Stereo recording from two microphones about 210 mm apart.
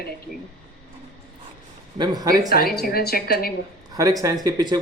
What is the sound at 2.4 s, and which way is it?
A woman's voice, 45° left (ahead or behind).